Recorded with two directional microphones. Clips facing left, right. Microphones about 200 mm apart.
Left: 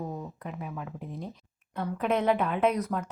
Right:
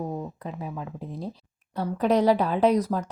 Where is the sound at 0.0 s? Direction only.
35° right (ahead or behind).